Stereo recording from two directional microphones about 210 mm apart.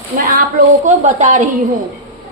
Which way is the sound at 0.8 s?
35° right (ahead or behind).